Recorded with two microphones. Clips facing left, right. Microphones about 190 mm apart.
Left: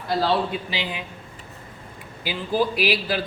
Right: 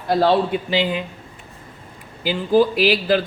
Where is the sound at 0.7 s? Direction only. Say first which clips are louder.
Right 9 dB; 50° right (ahead or behind).